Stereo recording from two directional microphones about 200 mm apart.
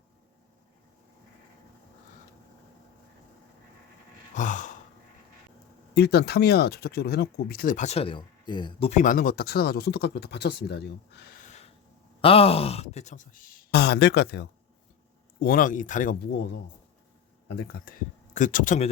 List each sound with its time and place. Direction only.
4.4 s gasp: 40° left (ahead or behind)
5.9 s speech: 55° left (ahead or behind); by 8.9 s 25° left (ahead or behind)
8.9 s speech: 40° left (ahead or behind); by 10.8 s 55° left (ahead or behind)
12.2 s speech: 30° left (ahead or behind); by 14.4 s 55° left (ahead or behind)
15.4 s speech: 45° left (ahead or behind)
17.5 s speech: 50° left (ahead or behind)